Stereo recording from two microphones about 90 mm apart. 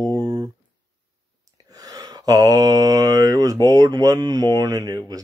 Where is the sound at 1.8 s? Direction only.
45° right (ahead or behind).